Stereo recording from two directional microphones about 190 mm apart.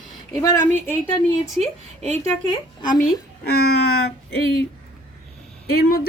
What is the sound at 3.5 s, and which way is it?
Speech, 55° left (ahead or behind).